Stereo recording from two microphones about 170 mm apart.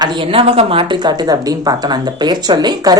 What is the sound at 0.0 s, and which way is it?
Speech, 25° right (ahead or behind).